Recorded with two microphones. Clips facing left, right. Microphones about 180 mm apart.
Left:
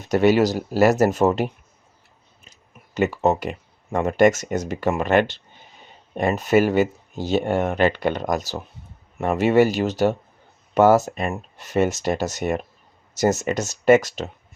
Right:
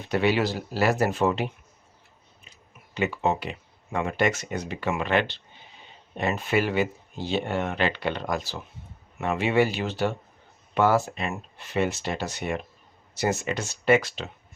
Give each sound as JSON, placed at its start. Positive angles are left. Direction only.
{"t": 0.0, "sound": "speech", "side_deg": 45}
{"t": 2.5, "sound": "a sound", "side_deg": 45}
{"t": 3.9, "sound": "speech", "side_deg": 45}